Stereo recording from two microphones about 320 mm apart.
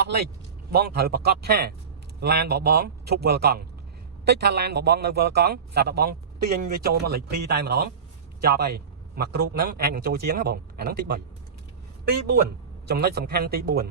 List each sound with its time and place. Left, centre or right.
0.0 s a man's voice: right
12.9 s a man's voice: right